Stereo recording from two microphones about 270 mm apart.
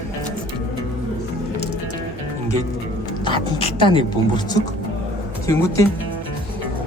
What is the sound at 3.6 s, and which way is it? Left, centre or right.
Speech, centre.